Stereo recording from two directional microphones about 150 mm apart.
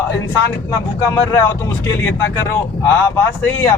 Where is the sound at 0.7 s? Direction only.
25° left (ahead or behind).